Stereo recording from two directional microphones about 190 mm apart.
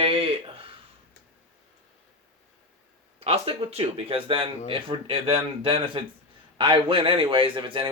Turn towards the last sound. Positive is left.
turn(degrees=-25)  # may be behind; listen again after turning